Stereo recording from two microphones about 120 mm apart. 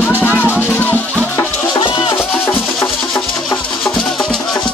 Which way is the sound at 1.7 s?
35° left (ahead or behind).